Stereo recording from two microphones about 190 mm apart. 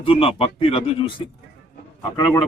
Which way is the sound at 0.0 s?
30° left (ahead or behind).